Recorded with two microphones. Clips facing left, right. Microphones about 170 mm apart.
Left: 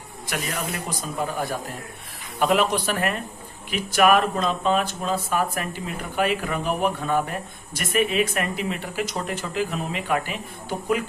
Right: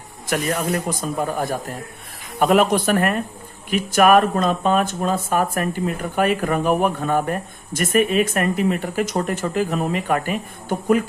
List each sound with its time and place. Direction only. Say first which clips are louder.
0.3 s speech: right 8 dB; 45° right (ahead or behind)